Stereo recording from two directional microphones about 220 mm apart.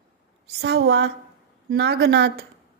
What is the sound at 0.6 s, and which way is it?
A woman's voice, 50° right (ahead or behind).